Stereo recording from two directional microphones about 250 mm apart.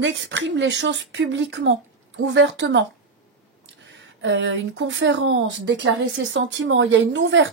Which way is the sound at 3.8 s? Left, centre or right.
Right.